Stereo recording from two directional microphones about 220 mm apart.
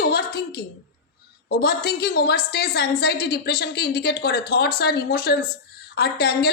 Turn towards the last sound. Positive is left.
turn(degrees=45)  # may be behind; listen again after turning